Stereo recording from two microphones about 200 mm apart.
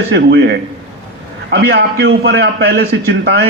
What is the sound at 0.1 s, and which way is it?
A man's voice, 55° right (ahead or behind).